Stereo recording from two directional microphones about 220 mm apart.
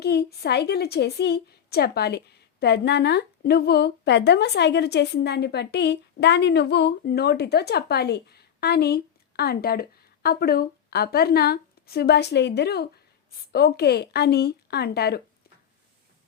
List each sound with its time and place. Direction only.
0.0 s a woman's voice: 45° left (ahead or behind)